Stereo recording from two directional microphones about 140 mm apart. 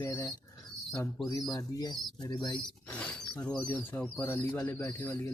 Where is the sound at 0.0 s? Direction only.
25° left (ahead or behind).